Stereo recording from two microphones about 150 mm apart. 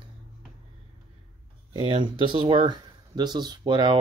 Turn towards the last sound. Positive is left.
turn(degrees=-30)  # may be behind; listen again after turning